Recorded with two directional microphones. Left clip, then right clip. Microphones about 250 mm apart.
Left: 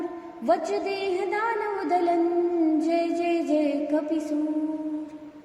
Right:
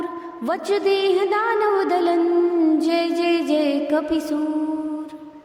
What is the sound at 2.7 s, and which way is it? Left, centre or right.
A woman's voice, right.